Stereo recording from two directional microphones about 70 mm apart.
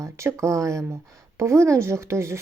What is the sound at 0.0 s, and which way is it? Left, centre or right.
A woman's voice, right.